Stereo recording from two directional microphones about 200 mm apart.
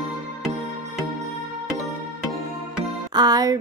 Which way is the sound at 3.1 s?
20° right (ahead or behind).